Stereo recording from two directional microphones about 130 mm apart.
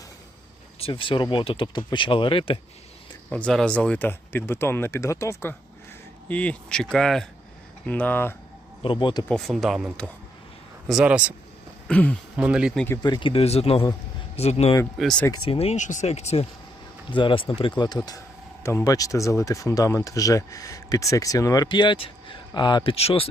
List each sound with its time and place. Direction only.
0.8 s speech: 45° left (ahead or behind)
3.2 s speech: 5° left (ahead or behind)
8.8 s speech: 40° left (ahead or behind)
9.3 s speech: centre (ahead or behind)
11.9 s speech: 10° left (ahead or behind)
12.4 s speech: 5° right (ahead or behind)
13.0 s speech: 35° left (ahead or behind); by 14.7 s 55° left (ahead or behind)
14.9 s speech: 5° left (ahead or behind)
15.4 s speech: 50° left (ahead or behind)
17.1 s speech: 40° left (ahead or behind)